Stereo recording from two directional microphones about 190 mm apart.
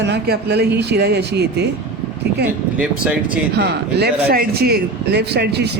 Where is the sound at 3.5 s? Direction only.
60° right (ahead or behind).